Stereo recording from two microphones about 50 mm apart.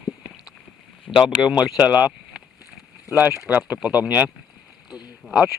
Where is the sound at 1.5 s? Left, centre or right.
Right.